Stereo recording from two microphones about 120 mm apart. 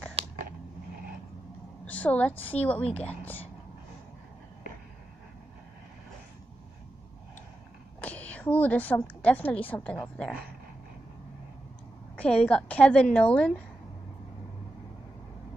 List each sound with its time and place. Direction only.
0.2 s a sound: 55° right (ahead or behind)
1.9 s a woman's voice: 10° left (ahead or behind)
8.0 s a woman's voice: 10° left (ahead or behind)
12.2 s a woman's voice: 10° left (ahead or behind)